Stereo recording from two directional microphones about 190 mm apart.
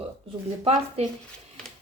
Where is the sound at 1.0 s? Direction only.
35° right (ahead or behind).